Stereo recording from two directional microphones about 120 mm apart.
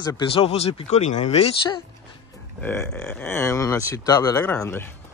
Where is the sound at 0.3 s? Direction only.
55° left (ahead or behind).